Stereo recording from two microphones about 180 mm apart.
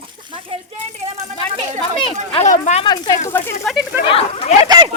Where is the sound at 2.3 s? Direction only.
40° left (ahead or behind).